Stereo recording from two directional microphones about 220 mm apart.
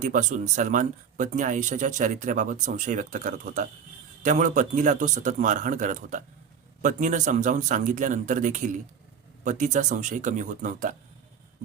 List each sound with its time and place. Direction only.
0.0 s speech: 35° right (ahead or behind)